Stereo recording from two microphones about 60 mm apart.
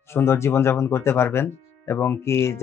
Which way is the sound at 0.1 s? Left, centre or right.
Left.